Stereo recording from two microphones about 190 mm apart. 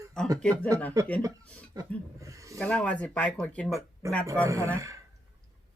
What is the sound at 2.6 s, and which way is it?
Speech, 5° left (ahead or behind).